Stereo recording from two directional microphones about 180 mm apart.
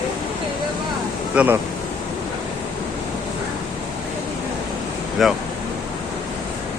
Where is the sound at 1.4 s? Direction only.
5° right (ahead or behind).